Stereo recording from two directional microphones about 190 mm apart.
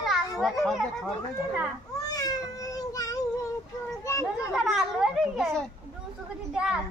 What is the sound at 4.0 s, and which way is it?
Children playing, 15° left (ahead or behind).